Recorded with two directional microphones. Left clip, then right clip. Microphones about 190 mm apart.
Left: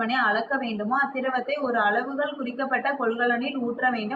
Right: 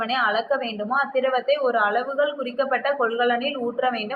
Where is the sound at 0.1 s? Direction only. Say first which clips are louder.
Right 3 dB; 45° right (ahead or behind).